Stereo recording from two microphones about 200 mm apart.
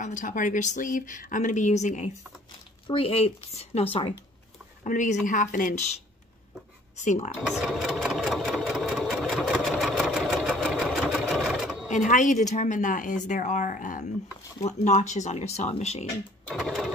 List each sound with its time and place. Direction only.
0.0 s speech: 40° left (ahead or behind)
4.8 s speech: 40° left (ahead or behind)
7.0 s speech: 35° left (ahead or behind)
7.4 s sewing machine: centre (ahead or behind)
12.1 s speech: 40° left (ahead or behind)
16.4 s speech: centre (ahead or behind)